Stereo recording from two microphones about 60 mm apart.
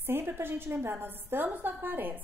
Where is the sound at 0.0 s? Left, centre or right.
Right.